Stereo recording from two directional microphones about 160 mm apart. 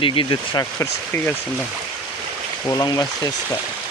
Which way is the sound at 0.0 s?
30° left (ahead or behind).